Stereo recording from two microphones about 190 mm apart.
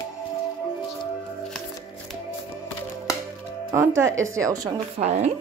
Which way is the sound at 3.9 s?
85° right.